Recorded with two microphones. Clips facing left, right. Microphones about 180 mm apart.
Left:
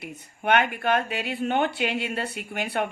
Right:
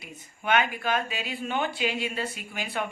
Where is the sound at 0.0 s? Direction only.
60° left (ahead or behind).